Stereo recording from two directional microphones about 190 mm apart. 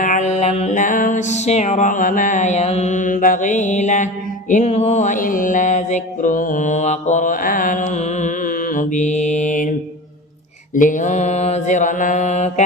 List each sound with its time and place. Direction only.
0.0 s music: 40° left (ahead or behind)
10.8 s mantra: 45° left (ahead or behind)